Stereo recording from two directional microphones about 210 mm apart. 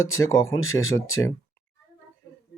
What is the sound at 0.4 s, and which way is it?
Speech, 75° left (ahead or behind).